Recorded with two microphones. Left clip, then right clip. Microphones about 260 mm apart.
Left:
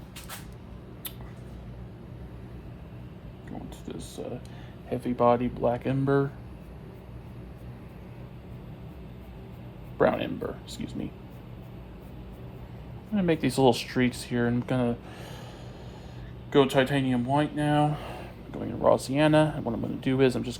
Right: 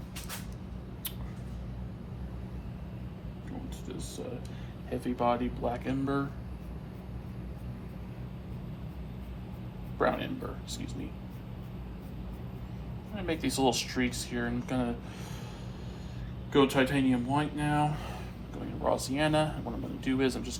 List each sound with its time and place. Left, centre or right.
4.9 s speech: left
10.0 s a sound: left
13.1 s speech: left
16.5 s speech: left